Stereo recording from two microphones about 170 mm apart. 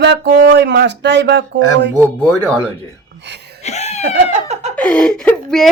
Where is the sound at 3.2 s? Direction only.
85° right.